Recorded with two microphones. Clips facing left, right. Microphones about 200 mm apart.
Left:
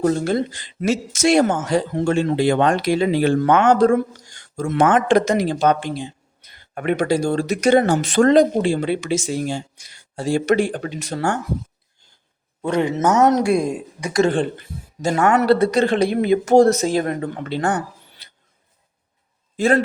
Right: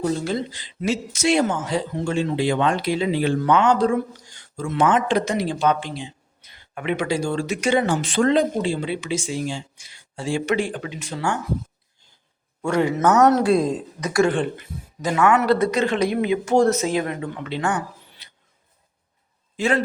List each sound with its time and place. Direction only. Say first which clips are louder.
0.0 s speech: left 5 dB; 55° left (ahead or behind)
12.6 s speech: left 1 dB; 20° left (ahead or behind)
14.3 s speech: left 2 dB; 30° left (ahead or behind)
19.5 s a man's voice: left 4 dB; 50° left (ahead or behind)